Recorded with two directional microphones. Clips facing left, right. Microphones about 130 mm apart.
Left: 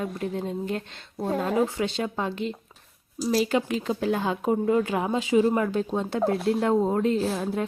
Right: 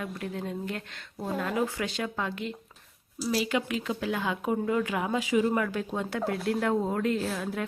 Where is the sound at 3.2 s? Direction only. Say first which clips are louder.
Left 5 dB; 40° left (ahead or behind).